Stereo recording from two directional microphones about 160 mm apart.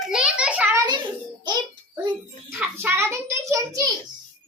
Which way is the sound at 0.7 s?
25° right (ahead or behind).